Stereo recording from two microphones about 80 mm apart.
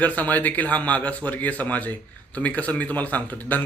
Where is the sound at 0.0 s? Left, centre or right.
Centre.